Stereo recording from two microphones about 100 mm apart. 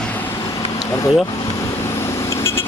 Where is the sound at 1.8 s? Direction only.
25° left (ahead or behind).